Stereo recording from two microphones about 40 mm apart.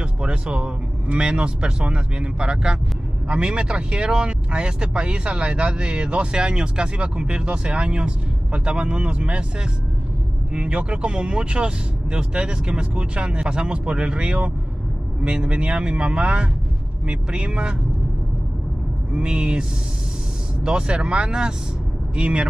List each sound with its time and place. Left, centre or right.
0.2 s speech: right
19.1 s speech: centre
20.6 s speech: right